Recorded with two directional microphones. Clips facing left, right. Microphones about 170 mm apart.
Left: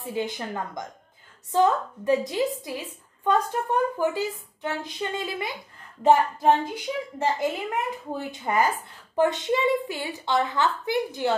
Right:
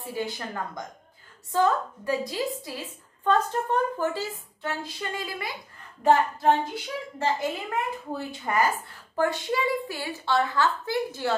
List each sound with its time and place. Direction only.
0.0 s a child's voice: 20° left (ahead or behind)
1.5 s a child's voice: 20° left (ahead or behind)